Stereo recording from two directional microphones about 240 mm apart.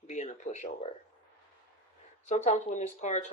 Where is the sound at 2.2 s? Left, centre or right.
Left.